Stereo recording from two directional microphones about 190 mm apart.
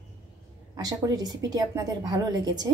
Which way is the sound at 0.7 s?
20° right (ahead or behind).